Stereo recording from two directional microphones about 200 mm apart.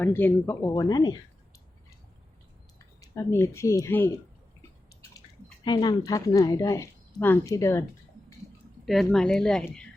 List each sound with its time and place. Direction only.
0.0 s speech: 10° left (ahead or behind)
3.0 s speech: 15° left (ahead or behind)
5.6 s speech: 20° left (ahead or behind)
8.9 s speech: centre (ahead or behind)